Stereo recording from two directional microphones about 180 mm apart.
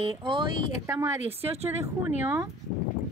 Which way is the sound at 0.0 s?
30° right (ahead or behind).